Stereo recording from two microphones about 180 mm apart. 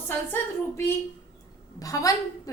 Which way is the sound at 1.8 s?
20° left (ahead or behind).